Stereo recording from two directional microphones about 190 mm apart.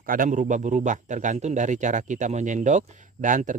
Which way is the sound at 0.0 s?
45° right (ahead or behind).